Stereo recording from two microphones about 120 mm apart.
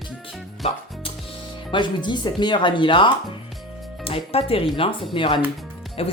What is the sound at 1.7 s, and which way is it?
Speech, 40° left (ahead or behind).